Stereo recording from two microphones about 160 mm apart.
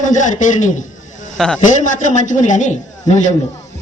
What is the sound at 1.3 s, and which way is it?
Speech, 5° left (ahead or behind).